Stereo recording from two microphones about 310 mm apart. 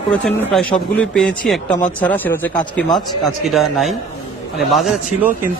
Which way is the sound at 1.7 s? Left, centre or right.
Left.